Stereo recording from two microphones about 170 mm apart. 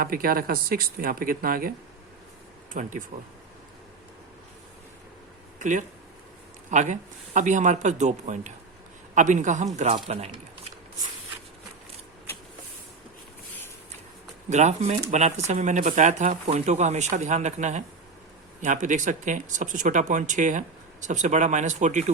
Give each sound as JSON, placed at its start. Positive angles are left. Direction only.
{"t": 0.0, "sound": "speech", "side_deg": -60}
{"t": 2.8, "sound": "speech", "side_deg": -50}
{"t": 5.5, "sound": "speech", "side_deg": -45}
{"t": 14.5, "sound": "speech", "side_deg": -45}